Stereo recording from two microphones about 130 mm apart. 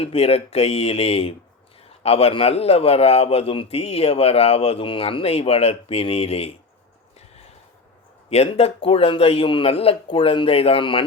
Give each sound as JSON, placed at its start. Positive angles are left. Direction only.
{"t": 0.0, "sound": "a man's voice", "side_deg": 50}
{"t": 8.3, "sound": "a man's voice", "side_deg": 55}